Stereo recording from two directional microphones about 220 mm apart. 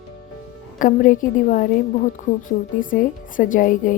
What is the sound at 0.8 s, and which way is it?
Speech, 35° left (ahead or behind).